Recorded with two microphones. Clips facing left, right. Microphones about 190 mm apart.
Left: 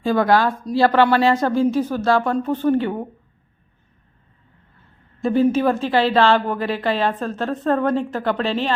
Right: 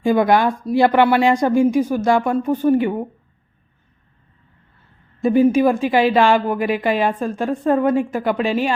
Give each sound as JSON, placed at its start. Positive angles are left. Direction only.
{"t": 0.0, "sound": "a woman's voice", "side_deg": -15}
{"t": 5.2, "sound": "a woman's voice", "side_deg": -15}